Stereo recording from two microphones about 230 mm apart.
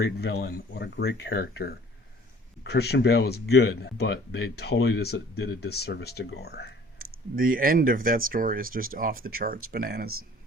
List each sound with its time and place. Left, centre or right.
0.0 s speech: left
7.3 s speech: right